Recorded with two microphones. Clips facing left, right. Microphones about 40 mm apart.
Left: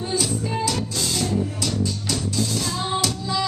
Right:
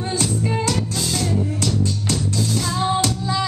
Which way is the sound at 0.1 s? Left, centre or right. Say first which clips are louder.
Right 2 dB; right.